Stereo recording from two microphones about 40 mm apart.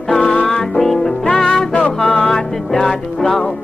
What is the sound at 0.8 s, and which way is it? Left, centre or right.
Music, centre.